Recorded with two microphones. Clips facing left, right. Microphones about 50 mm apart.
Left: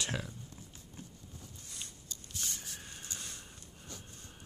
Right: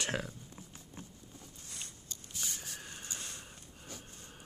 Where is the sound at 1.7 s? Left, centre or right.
Right.